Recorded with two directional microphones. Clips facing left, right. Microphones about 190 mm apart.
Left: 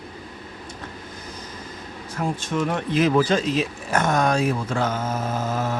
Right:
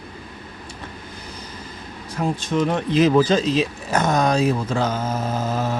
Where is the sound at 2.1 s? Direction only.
20° right (ahead or behind).